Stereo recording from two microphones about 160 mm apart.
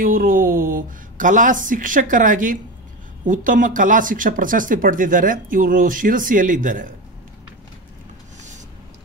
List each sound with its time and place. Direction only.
0.0 s speech: 60° right (ahead or behind)